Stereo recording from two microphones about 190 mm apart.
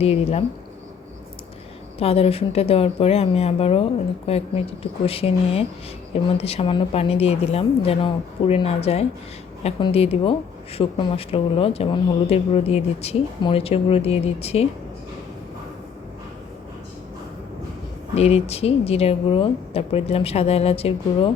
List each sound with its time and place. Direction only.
0.0 s speech: 35° left (ahead or behind)
2.0 s speech: 30° left (ahead or behind)
18.1 s speech: 35° left (ahead or behind)